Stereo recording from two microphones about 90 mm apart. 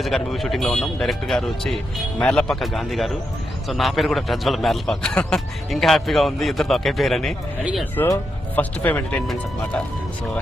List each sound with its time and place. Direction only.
0.0 s a man's voice: centre (ahead or behind)
8.0 s speech: 25° left (ahead or behind)